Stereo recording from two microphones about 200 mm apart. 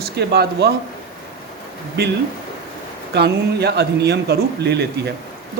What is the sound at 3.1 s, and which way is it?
Speech, 55° right (ahead or behind).